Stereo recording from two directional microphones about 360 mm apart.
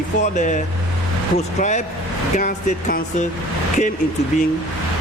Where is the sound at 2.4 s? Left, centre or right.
Left.